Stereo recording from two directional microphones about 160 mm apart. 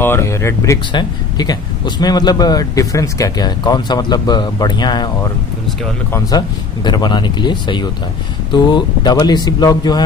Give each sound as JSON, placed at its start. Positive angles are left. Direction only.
{"t": 0.0, "sound": "speech", "side_deg": 15}